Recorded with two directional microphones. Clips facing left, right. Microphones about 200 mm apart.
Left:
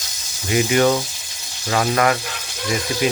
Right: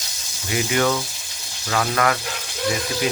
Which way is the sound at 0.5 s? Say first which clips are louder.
Left 4 dB; 25° left (ahead or behind).